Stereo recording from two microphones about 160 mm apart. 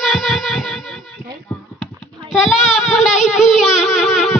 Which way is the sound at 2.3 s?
Centre (ahead or behind).